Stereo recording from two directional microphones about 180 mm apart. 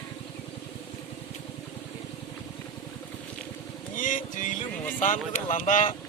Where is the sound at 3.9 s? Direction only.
45° left (ahead or behind).